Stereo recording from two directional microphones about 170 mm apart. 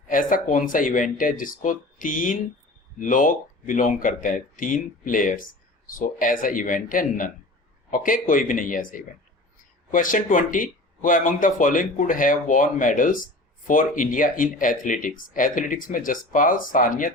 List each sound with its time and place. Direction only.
0.1 s speech: 55° left (ahead or behind)